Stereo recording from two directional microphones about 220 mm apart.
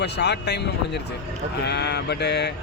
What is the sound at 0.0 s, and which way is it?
Speech, 50° left (ahead or behind).